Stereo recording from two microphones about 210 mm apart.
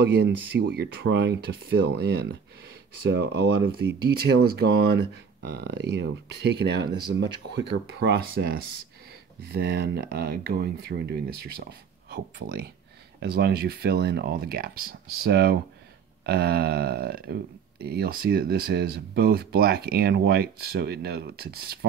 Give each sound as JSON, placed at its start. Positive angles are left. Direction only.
{"t": 0.0, "sound": "speech", "side_deg": -55}